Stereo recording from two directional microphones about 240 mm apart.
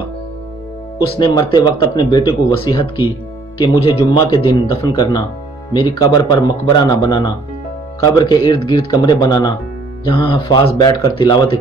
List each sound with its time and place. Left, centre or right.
1.1 s speech: centre